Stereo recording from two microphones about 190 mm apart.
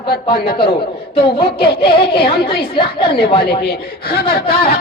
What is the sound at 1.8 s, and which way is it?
Speech, 25° left (ahead or behind).